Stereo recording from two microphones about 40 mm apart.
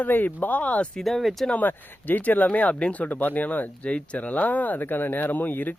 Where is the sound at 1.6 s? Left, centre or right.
Left.